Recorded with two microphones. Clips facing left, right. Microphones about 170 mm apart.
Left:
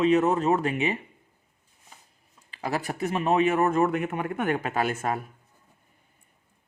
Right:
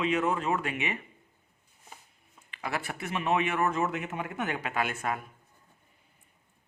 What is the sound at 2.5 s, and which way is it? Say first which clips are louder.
Speech: left 5 dB; 35° left (ahead or behind).